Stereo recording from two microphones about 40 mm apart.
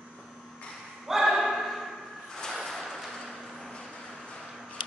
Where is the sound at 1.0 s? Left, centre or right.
Centre.